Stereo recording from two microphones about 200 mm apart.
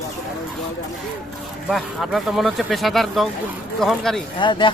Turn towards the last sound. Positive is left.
turn(degrees=25)  # may be behind; listen again after turning